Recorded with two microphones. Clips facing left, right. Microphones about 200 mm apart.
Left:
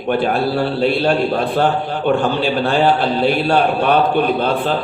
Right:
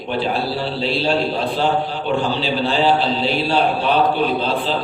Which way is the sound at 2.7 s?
55° left (ahead or behind).